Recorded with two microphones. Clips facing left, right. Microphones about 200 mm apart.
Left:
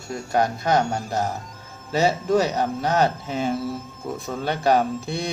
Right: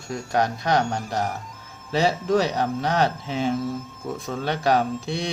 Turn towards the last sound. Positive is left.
turn(degrees=0)  # may be behind; listen again after turning